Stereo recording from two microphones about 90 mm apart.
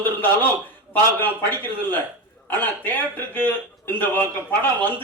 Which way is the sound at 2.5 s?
20° left (ahead or behind).